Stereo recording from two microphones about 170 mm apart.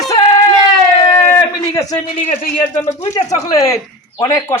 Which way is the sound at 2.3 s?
50° left (ahead or behind).